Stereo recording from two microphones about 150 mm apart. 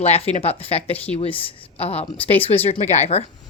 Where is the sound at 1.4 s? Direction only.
40° left (ahead or behind).